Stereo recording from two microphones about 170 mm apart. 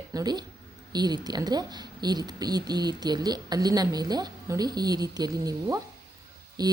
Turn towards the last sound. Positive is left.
turn(degrees=-25)  # may be behind; listen again after turning